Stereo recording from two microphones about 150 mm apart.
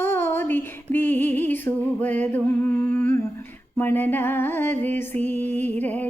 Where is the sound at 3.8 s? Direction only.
15° left (ahead or behind).